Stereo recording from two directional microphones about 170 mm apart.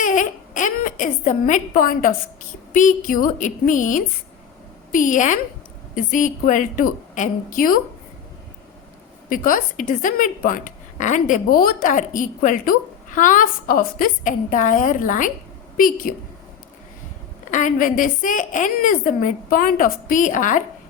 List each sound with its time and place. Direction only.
0.0 s baby cry: 50° left (ahead or behind)
2.7 s a woman's voice: 50° left (ahead or behind)
9.3 s a woman's voice: 55° left (ahead or behind)
17.5 s a woman's voice: 50° left (ahead or behind)